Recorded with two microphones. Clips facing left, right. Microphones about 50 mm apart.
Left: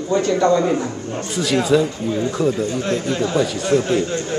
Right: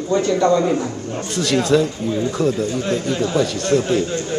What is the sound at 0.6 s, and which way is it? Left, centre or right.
Speech, centre.